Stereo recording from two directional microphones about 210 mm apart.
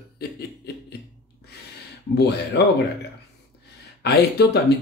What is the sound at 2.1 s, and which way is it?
Speech, 50° left (ahead or behind).